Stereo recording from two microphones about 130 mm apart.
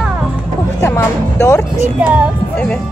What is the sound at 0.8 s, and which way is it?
Music, 20° left (ahead or behind).